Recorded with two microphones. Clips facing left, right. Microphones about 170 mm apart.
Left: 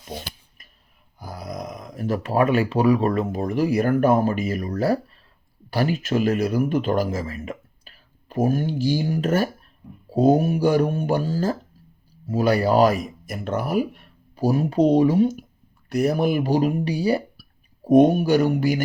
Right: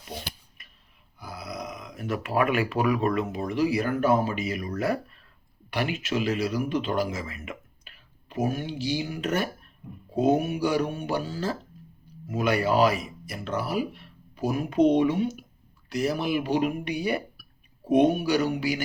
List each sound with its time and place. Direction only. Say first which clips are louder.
1.2 s speech: left 4 dB; 40° left (ahead or behind)
15.9 s speech: left 6 dB; 55° left (ahead or behind)